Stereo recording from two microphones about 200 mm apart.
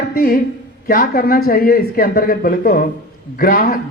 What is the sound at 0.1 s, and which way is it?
A man's voice, 45° left (ahead or behind).